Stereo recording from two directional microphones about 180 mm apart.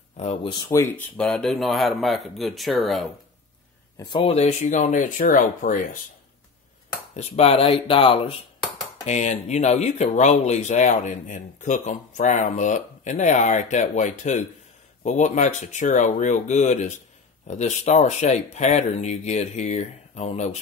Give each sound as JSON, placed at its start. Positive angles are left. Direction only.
{"t": 0.2, "sound": "speech", "side_deg": 30}
{"t": 0.7, "sound": "speech", "side_deg": 10}
{"t": 4.0, "sound": "speech", "side_deg": 30}
{"t": 7.2, "sound": "speech", "side_deg": 35}
{"t": 9.0, "sound": "speech", "side_deg": 40}